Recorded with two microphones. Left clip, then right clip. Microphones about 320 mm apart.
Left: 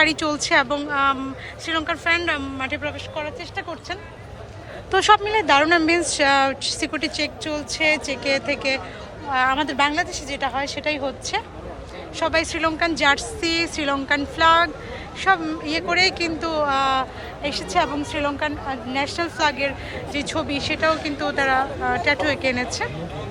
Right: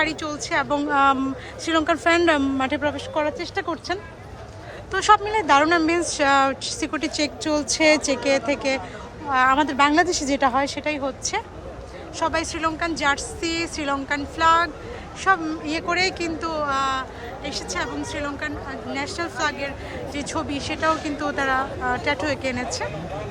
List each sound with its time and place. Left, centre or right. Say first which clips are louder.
0.0 s speech: left 5 dB; centre
4.9 s speech: left 1 dB; centre